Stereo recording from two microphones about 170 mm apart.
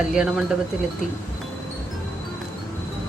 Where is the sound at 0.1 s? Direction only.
5° right (ahead or behind).